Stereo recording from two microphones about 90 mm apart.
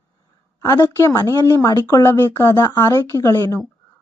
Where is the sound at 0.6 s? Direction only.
35° left (ahead or behind).